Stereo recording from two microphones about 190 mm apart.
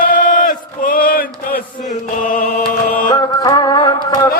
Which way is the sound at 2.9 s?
50° left (ahead or behind).